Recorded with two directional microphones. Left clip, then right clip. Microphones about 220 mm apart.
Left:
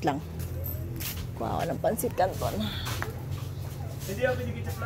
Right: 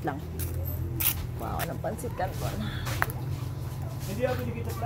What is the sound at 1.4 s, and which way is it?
Speech, 40° left (ahead or behind).